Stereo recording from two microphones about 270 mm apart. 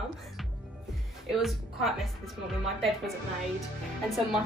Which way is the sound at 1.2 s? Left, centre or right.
Centre.